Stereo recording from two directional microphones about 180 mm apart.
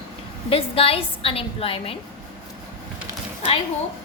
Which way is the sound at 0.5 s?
30° left (ahead or behind).